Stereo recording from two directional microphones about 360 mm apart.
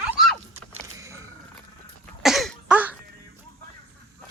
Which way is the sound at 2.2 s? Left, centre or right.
Centre.